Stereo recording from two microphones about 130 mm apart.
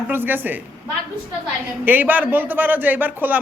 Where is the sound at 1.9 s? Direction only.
15° right (ahead or behind).